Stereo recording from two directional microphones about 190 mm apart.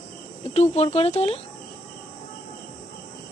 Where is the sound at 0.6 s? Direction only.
30° left (ahead or behind).